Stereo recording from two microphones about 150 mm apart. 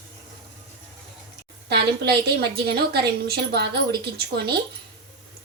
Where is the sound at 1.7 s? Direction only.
90° right.